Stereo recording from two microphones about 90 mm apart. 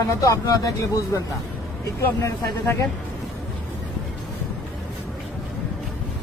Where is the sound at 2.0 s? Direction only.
30° left (ahead or behind).